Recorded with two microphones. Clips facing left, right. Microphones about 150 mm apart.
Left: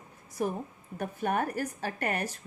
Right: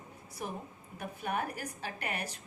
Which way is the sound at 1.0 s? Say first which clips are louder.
Left 6 dB; 45° left (ahead or behind).